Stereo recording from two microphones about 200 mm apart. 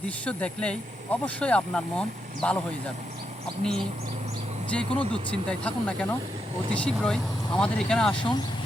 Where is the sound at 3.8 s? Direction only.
30° right (ahead or behind).